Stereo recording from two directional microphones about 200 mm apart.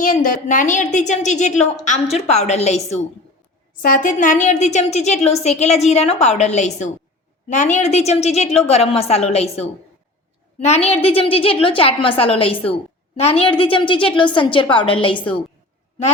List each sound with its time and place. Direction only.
0.0 s a woman's voice: 40° left (ahead or behind); by 15.2 s 25° left (ahead or behind)